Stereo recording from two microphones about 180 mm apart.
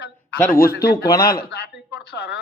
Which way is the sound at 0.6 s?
60° left (ahead or behind).